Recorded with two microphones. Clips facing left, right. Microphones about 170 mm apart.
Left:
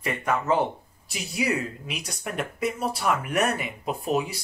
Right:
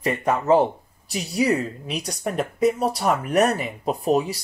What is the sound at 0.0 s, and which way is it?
Speech, 35° right (ahead or behind).